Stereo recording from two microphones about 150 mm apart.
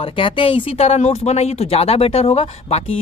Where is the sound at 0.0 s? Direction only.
40° left (ahead or behind).